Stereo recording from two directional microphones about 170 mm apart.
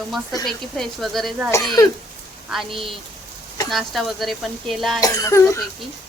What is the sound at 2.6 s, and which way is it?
Speech, 30° right (ahead or behind).